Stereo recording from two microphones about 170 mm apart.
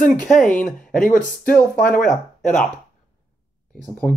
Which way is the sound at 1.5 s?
5° left (ahead or behind).